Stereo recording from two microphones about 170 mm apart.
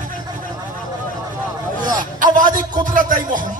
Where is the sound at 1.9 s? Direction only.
50° right (ahead or behind).